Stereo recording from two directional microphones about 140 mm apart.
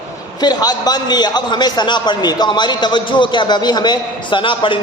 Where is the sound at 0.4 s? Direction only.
30° left (ahead or behind).